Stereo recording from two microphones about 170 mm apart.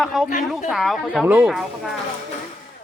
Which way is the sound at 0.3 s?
50° left (ahead or behind).